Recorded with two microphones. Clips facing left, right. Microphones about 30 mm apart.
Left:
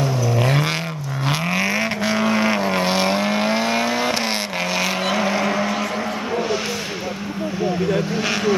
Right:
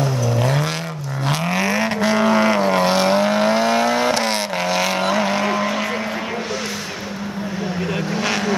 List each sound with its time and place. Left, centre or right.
0.4 s vehicle: centre
8.1 s vehicle: centre